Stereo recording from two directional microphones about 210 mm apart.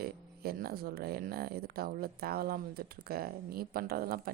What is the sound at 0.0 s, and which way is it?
Speech, 45° right (ahead or behind).